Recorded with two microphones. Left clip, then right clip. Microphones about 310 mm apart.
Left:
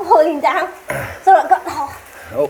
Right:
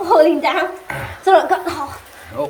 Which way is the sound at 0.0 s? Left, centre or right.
Right.